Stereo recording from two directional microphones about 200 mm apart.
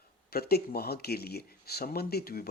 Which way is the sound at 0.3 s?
50° left (ahead or behind).